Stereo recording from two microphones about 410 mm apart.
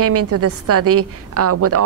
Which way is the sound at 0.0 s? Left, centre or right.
Right.